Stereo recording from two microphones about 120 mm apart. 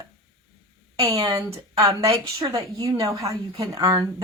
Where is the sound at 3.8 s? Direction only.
40° right (ahead or behind).